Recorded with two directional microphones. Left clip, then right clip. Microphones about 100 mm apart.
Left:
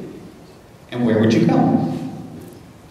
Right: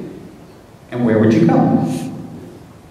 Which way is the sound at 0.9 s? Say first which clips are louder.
Right 3 dB; 25° left (ahead or behind).